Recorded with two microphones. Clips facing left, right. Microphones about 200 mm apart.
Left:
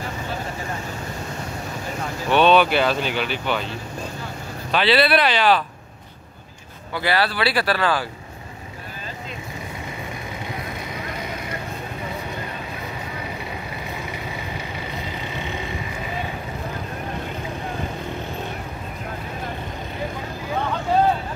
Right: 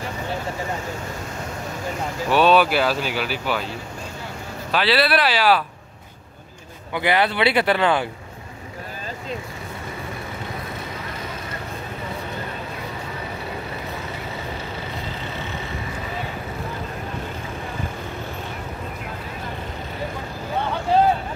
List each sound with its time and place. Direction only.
2.3 s speech: 5° right (ahead or behind)
4.6 s speech: 5° right (ahead or behind)
6.9 s speech: 20° right (ahead or behind)
15.2 s vehicle: 15° left (ahead or behind)